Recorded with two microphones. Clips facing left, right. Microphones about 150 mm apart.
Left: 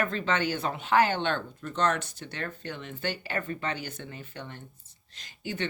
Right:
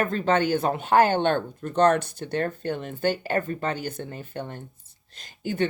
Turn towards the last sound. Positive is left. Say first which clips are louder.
# right 8 dB
turn(degrees=-50)  # may be behind; listen again after turning